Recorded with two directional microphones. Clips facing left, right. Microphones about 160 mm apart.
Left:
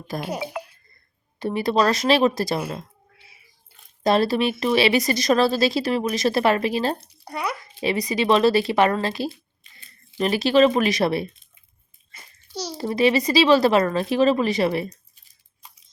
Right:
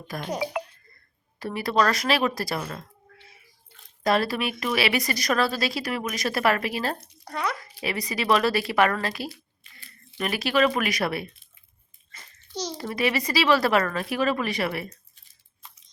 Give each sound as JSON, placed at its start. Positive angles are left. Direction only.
{"t": 0.1, "sound": "speech", "side_deg": 25}
{"t": 0.6, "sound": "a sound", "side_deg": -65}
{"t": 1.4, "sound": "speech", "side_deg": 25}
{"t": 3.2, "sound": "a sound", "side_deg": 10}
{"t": 4.0, "sound": "speech", "side_deg": 25}
{"t": 7.3, "sound": "speech", "side_deg": 10}
{"t": 7.7, "sound": "speech", "side_deg": 25}
{"t": 12.1, "sound": "babbling", "side_deg": 10}
{"t": 12.7, "sound": "speech", "side_deg": 25}
{"t": 15.6, "sound": "a sound", "side_deg": 15}